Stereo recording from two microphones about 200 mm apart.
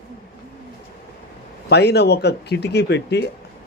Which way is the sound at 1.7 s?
55° left (ahead or behind).